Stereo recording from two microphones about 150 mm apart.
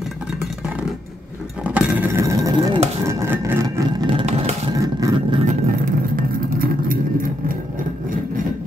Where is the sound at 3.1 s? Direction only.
20° right (ahead or behind).